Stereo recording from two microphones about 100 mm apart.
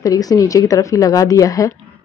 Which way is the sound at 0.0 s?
40° left (ahead or behind).